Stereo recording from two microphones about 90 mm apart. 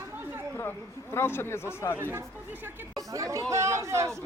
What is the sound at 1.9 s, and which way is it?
Speech, 25° right (ahead or behind).